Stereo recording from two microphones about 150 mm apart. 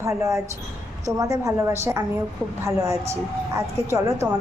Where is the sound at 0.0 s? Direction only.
20° right (ahead or behind).